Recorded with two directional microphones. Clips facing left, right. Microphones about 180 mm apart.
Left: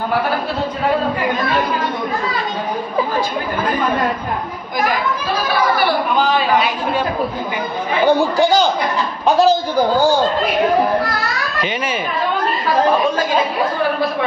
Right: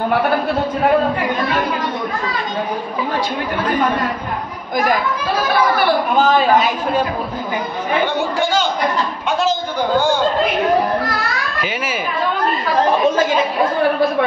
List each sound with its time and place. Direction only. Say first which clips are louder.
6.1 s a woman's voice: right 4 dB; 45° right (ahead or behind)
8.2 s a man's voice: left 4 dB; 35° left (ahead or behind)